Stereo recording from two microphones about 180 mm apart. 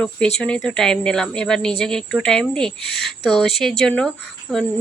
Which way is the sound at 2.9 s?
65° left (ahead or behind).